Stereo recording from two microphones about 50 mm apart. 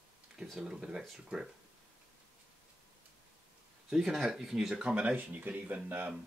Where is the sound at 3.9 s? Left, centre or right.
Centre.